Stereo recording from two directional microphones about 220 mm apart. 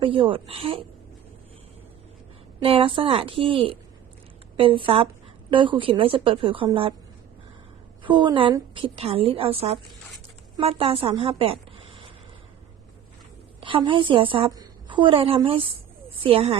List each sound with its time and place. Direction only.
0.0 s a woman's voice: 25° right (ahead or behind)
2.6 s a woman's voice: 25° right (ahead or behind)
8.0 s a woman's voice: 20° right (ahead or behind)
13.6 s a woman's voice: 25° right (ahead or behind)